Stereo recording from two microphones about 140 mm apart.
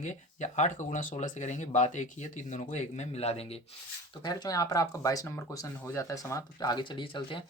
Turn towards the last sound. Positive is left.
turn(degrees=35)  # may be behind; listen again after turning